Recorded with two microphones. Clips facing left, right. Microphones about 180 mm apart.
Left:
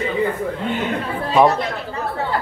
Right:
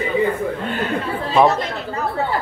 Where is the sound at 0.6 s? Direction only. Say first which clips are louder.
Even; 20° left (ahead or behind).